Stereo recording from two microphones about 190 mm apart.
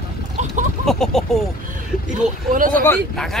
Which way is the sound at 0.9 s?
Centre (ahead or behind).